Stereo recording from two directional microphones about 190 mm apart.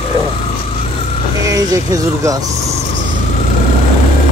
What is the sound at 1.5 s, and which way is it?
Speech, 20° right (ahead or behind).